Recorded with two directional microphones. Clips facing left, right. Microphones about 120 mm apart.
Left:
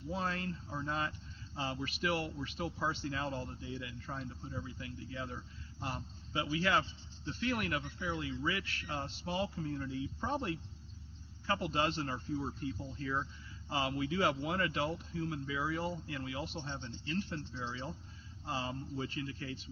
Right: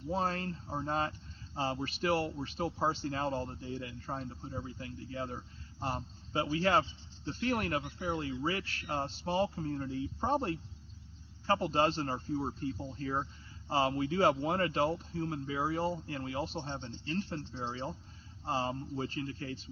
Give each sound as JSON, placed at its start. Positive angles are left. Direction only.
{"t": 0.1, "sound": "speech", "side_deg": -40}